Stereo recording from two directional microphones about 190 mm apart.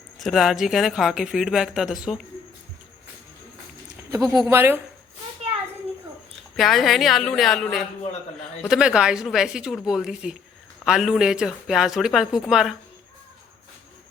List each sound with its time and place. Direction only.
0.2 s speech: centre (ahead or behind)
4.4 s speech: 10° right (ahead or behind)
6.6 s speech: centre (ahead or behind)